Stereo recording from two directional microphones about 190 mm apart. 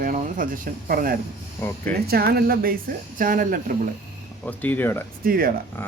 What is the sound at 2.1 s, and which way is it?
Speech, 55° right (ahead or behind).